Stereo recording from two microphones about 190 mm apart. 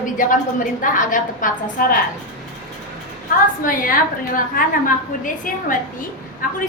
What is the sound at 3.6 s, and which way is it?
A woman's voice, 45° left (ahead or behind).